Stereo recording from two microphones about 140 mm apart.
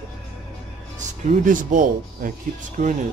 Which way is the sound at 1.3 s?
70° right (ahead or behind).